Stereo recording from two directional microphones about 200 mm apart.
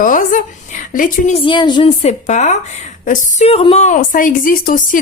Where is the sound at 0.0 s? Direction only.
40° left (ahead or behind).